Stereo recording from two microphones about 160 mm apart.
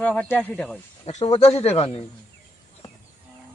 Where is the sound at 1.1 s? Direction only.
45° left (ahead or behind).